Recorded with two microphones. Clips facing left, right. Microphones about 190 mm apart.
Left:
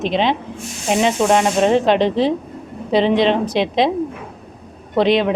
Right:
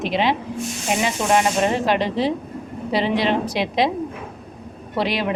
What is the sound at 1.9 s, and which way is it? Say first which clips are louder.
A woman's voice: left 5 dB; 20° left (ahead or behind).